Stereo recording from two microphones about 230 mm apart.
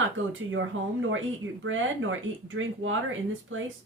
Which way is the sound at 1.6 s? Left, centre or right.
Right.